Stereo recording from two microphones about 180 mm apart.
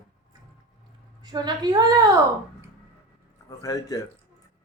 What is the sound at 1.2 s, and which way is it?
Speech, 25° right (ahead or behind).